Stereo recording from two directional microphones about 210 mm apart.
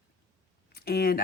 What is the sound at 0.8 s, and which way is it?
Speech, 50° left (ahead or behind).